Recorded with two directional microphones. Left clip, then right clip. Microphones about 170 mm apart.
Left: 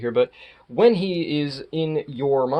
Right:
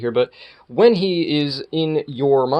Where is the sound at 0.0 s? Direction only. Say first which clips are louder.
Right 2 dB; 30° right (ahead or behind).